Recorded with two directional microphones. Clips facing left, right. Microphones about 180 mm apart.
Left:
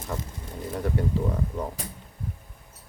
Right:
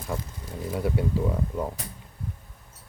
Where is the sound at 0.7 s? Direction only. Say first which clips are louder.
Right 1 dB; 10° right (ahead or behind).